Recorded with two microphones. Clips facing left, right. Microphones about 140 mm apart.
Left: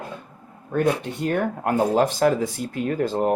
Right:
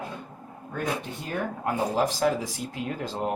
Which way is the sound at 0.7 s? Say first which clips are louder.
Left 9 dB; 70° left (ahead or behind).